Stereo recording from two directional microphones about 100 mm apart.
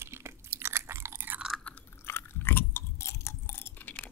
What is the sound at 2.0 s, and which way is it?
Chewing, 20° left (ahead or behind).